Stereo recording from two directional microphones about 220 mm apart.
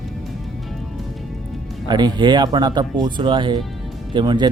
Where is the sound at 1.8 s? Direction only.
20° right (ahead or behind).